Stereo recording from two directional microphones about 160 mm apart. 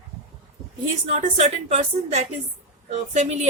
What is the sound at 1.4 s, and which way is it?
A woman's voice, 45° right (ahead or behind).